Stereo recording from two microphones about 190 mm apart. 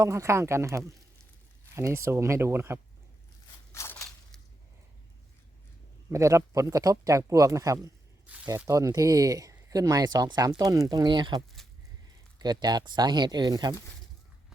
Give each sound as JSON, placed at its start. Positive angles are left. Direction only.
{"t": 0.0, "sound": "speech", "side_deg": -15}
{"t": 3.7, "sound": "a sound", "side_deg": 15}
{"t": 6.1, "sound": "speech", "side_deg": -15}